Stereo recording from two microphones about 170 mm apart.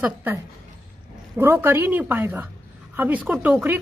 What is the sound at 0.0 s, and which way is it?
A woman's voice, 10° right (ahead or behind).